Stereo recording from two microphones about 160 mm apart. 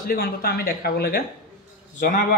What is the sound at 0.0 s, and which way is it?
Speech, 70° left (ahead or behind).